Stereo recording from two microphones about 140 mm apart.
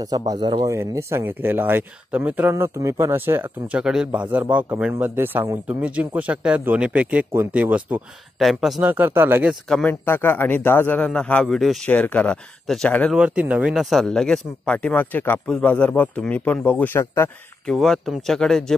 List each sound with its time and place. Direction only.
0.3 s a man's voice: 30° right (ahead or behind)
0.7 s speech: 20° right (ahead or behind)
2.5 s speech: 20° right (ahead or behind); by 8.8 s centre (ahead or behind)
8.8 s speech: 15° right (ahead or behind)
9.5 s speech: 5° left (ahead or behind)
10.0 s speech: 15° left (ahead or behind)
13.1 s speech: 5° right (ahead or behind); by 17.3 s 20° left (ahead or behind)
17.6 s speech: 5° left (ahead or behind)